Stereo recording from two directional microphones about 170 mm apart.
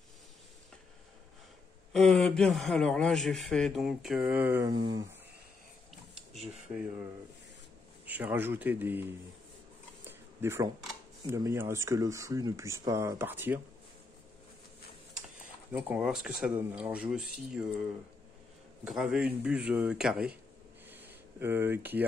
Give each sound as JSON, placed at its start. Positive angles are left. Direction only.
{"t": 1.9, "sound": "a man's voice", "side_deg": 0}
{"t": 4.6, "sound": "speech", "side_deg": -25}
{"t": 6.7, "sound": "speech", "side_deg": -10}
{"t": 8.0, "sound": "speech", "side_deg": -10}
{"t": 10.0, "sound": "a sound", "side_deg": -15}
{"t": 11.2, "sound": "speech", "side_deg": -15}
{"t": 15.7, "sound": "a man's voice", "side_deg": -5}
{"t": 18.9, "sound": "speech", "side_deg": -5}
{"t": 20.9, "sound": "a sound", "side_deg": -10}